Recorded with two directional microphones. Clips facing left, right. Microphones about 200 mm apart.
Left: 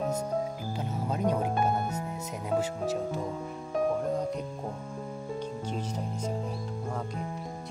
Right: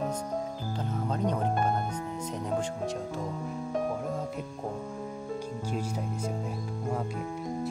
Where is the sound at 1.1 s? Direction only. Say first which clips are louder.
Left 1 dB; 10° left (ahead or behind).